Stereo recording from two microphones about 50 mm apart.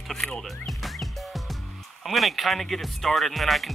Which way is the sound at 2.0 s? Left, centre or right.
Centre.